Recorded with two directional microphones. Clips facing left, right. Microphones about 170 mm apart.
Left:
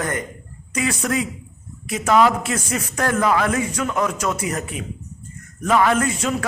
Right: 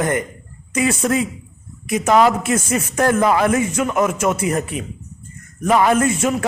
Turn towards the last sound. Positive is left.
turn(degrees=-20)  # may be behind; listen again after turning